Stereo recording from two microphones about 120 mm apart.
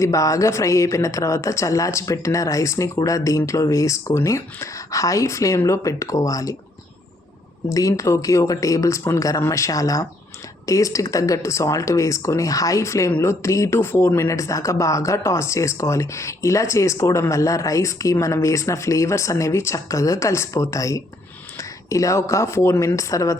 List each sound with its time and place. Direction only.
0.0 s speech: 25° left (ahead or behind)
7.7 s speech: 30° left (ahead or behind)